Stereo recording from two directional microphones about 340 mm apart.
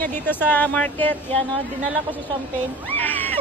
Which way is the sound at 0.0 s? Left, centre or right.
Centre.